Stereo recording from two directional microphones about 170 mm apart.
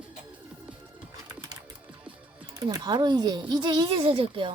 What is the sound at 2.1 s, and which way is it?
A child's voice, 20° right (ahead or behind).